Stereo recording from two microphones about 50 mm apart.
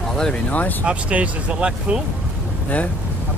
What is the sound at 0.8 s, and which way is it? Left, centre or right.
Speech, right.